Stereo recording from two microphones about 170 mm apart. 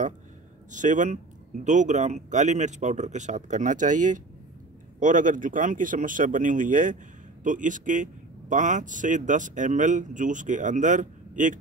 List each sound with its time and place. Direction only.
0.7 s speech: 50° right (ahead or behind)